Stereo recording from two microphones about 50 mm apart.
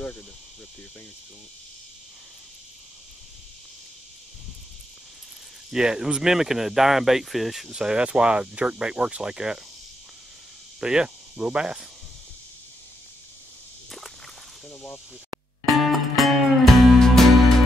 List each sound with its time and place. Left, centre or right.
5.7 s speech: centre
7.7 s speech: centre
10.8 s speech: centre
15.8 s music: centre